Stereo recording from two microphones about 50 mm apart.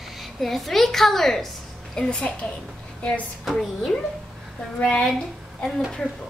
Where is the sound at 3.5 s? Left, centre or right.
Centre.